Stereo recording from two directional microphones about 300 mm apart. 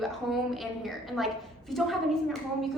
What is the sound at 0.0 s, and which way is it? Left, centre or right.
A woman's voice, centre.